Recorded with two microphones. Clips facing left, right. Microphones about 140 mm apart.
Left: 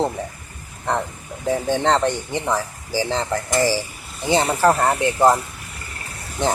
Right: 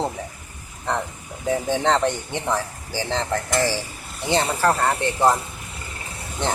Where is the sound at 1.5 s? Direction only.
Centre (ahead or behind).